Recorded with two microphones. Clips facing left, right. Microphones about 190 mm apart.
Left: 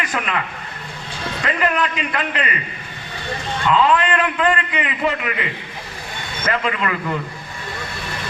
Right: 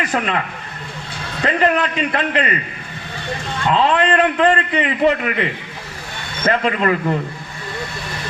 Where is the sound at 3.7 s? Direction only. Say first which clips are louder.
Right 1 dB; 35° right (ahead or behind).